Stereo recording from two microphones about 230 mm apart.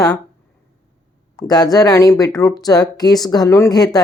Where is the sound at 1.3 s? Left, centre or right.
Centre.